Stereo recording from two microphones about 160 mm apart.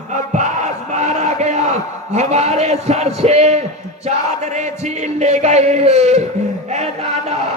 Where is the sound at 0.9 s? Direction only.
45° right (ahead or behind).